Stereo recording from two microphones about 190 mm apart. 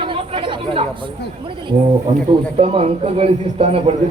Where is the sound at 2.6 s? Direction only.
30° right (ahead or behind).